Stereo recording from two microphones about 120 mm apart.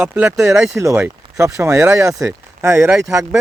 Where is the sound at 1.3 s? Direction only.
25° right (ahead or behind).